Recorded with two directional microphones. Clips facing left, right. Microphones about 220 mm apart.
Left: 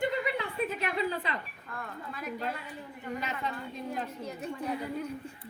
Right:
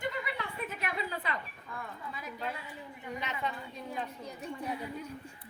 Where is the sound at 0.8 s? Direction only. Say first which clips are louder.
Left 5 dB; 30° left (ahead or behind).